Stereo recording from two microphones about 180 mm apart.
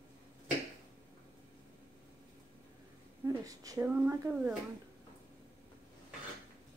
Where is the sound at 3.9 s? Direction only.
10° right (ahead or behind).